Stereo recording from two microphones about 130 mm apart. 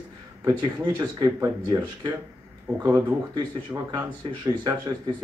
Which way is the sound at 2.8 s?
25° right (ahead or behind).